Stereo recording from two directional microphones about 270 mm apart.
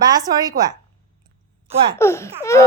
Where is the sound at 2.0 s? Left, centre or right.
Centre.